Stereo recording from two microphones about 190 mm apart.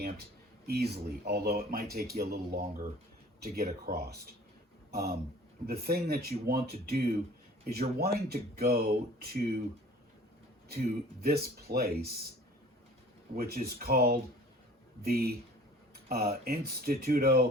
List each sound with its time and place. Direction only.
0.7 s speech: 60° right (ahead or behind)
10.7 s speech: 55° right (ahead or behind)
13.3 s speech: 55° right (ahead or behind)